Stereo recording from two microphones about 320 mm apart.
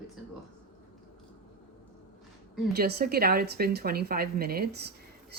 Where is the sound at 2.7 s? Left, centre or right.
Right.